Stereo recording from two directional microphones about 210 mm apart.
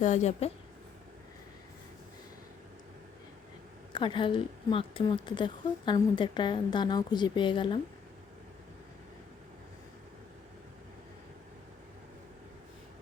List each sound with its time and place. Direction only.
0.0 s a woman's voice: 35° left (ahead or behind)
3.9 s a woman's voice: 25° left (ahead or behind)